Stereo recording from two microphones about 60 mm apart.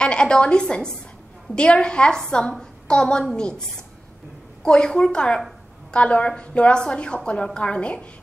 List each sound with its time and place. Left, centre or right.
0.0 s a woman's voice: centre
4.6 s a woman's voice: centre